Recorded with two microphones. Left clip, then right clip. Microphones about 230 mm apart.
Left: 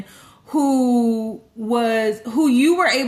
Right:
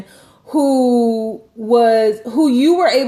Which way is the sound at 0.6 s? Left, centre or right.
Left.